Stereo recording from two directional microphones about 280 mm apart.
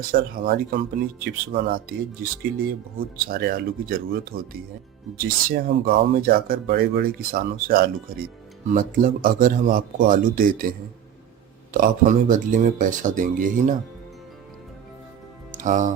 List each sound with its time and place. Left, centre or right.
0.1 s speech: right
3.2 s speech: right
15.5 s speech: right